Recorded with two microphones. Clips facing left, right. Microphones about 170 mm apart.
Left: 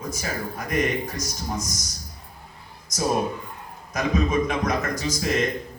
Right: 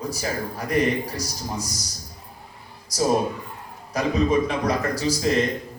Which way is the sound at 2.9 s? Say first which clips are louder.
Right 3 dB; 35° right (ahead or behind).